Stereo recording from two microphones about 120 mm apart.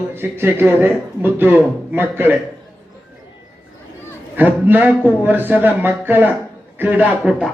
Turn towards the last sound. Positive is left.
turn(degrees=-15)  # may be behind; listen again after turning